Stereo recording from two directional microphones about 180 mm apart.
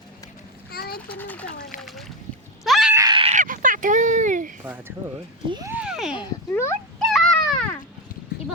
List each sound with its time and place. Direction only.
0.7 s a sound: 60° left (ahead or behind)
0.9 s a child's voice: 10° left (ahead or behind)
2.6 s screaming: centre (ahead or behind)
2.9 s screaming: 20° right (ahead or behind)
3.3 s a sound: 50° right (ahead or behind)
4.6 s speech: 10° right (ahead or behind)
5.5 s speech: 20° right (ahead or behind)
5.7 s speech: 5° right (ahead or behind)
6.5 s speech: 15° left (ahead or behind)
7.0 s a sound: centre (ahead or behind)